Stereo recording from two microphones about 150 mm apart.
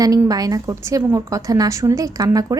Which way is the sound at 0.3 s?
25° right (ahead or behind).